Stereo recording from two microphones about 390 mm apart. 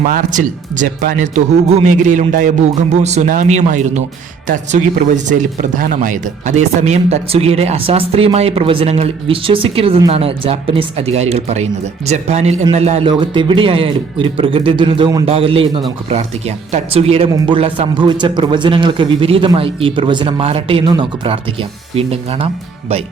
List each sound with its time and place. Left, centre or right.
0.0 s a man's voice: centre